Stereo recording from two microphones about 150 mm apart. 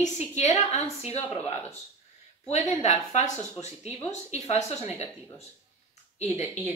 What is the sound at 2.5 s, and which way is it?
Speech, 50° left (ahead or behind).